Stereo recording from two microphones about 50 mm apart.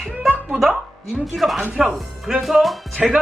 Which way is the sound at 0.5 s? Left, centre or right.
Centre.